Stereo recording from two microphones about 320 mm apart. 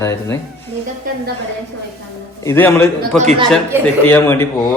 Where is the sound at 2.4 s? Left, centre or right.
Centre.